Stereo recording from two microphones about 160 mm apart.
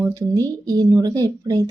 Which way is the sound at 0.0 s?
20° right (ahead or behind).